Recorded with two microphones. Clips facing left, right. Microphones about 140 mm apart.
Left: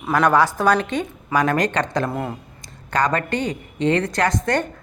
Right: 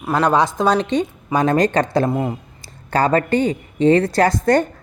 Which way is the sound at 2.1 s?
15° right (ahead or behind).